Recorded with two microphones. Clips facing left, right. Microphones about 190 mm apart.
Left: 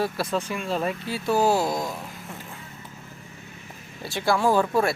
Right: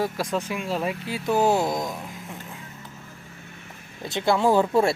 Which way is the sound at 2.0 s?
Centre (ahead or behind).